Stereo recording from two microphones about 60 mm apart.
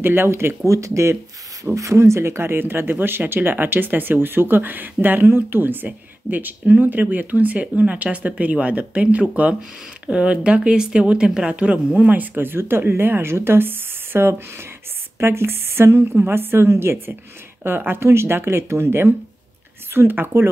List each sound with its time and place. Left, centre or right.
0.0 s speech: right
0.7 s a woman's voice: right